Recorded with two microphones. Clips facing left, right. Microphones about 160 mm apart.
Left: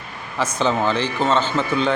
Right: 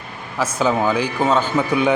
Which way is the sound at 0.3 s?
5° right (ahead or behind).